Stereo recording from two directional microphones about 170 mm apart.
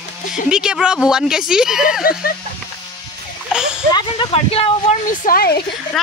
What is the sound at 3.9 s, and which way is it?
Speech, 25° left (ahead or behind).